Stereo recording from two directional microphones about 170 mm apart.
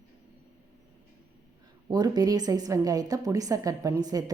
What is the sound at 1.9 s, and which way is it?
A woman's voice, 20° right (ahead or behind).